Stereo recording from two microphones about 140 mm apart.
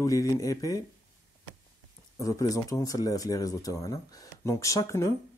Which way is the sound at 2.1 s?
25° left (ahead or behind).